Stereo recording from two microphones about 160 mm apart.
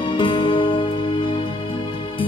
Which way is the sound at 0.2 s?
30° left (ahead or behind).